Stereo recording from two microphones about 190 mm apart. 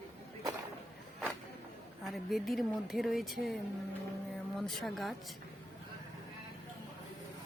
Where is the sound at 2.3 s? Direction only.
Centre (ahead or behind).